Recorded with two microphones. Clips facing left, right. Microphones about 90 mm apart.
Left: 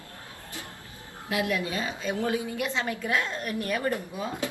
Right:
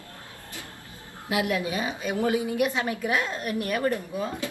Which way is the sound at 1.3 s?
15° right (ahead or behind).